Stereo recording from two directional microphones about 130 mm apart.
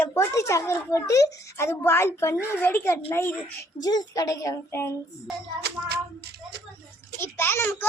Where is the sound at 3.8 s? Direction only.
30° left (ahead or behind).